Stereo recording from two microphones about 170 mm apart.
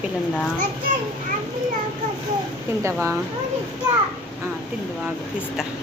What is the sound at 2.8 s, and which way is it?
Speech, 15° right (ahead or behind).